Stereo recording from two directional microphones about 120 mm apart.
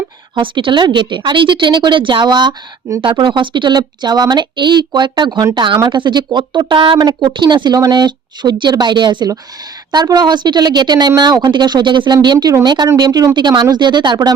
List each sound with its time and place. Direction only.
0.3 s speech: 45° right (ahead or behind)